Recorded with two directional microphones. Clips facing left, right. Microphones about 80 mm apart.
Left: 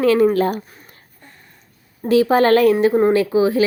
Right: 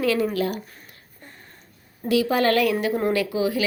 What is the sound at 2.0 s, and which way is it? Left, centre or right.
A woman's voice, left.